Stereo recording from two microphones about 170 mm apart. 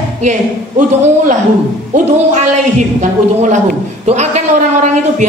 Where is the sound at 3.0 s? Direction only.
45° right (ahead or behind).